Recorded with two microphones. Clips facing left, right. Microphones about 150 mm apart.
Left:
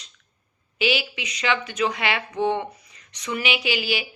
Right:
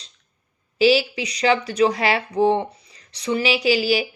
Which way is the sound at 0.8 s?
35° right (ahead or behind).